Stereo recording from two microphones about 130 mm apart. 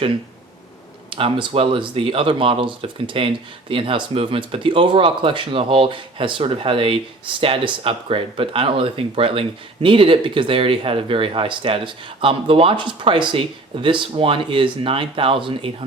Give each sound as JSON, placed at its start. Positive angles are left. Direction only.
{"t": 1.1, "sound": "speech", "side_deg": -40}